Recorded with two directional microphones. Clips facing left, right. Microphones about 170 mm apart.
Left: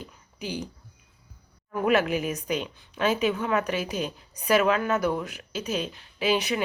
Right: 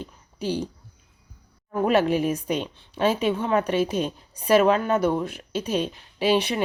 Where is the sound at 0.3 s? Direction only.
35° right (ahead or behind).